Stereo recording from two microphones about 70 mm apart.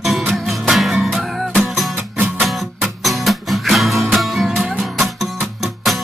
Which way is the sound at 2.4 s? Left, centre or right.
Centre.